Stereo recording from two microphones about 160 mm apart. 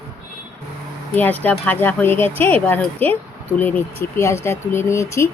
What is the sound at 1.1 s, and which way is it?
Speech, 10° left (ahead or behind).